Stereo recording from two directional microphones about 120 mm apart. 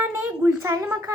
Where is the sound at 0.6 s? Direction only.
25° right (ahead or behind).